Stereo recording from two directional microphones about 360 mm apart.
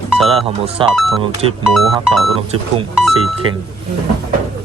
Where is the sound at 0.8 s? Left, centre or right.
Centre.